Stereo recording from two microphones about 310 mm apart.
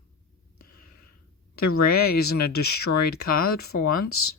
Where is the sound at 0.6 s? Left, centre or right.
Left.